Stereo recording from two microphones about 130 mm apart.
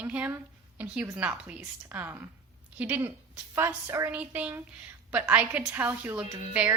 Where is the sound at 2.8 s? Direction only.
15° right (ahead or behind).